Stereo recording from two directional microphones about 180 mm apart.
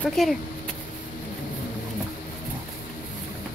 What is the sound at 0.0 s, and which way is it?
Speech, centre (ahead or behind).